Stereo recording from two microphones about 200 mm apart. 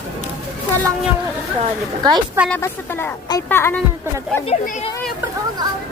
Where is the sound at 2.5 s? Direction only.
10° left (ahead or behind).